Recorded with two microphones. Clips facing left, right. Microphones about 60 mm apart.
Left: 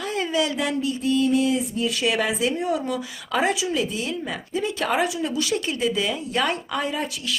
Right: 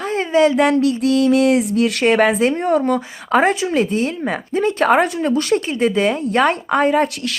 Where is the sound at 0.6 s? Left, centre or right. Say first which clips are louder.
Right 10 dB; right.